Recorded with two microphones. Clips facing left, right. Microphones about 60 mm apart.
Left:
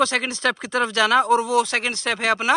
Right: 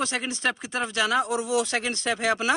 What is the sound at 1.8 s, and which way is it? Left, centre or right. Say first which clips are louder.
Speech: left 3 dB; left.